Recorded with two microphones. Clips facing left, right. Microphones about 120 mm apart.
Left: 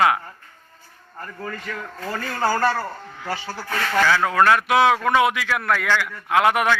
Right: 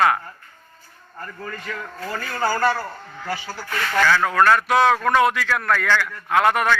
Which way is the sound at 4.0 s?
15° left (ahead or behind).